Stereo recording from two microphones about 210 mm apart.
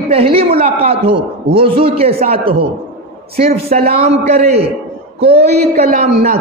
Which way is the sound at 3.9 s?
30° right (ahead or behind).